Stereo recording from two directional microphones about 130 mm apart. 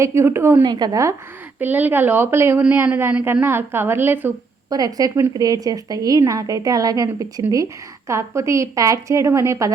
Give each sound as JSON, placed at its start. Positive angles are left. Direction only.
{"t": 0.0, "sound": "a woman's voice", "side_deg": -20}
{"t": 0.6, "sound": "a woman's voice", "side_deg": -35}
{"t": 1.5, "sound": "a woman's voice", "side_deg": -15}
{"t": 4.7, "sound": "a woman's voice", "side_deg": -30}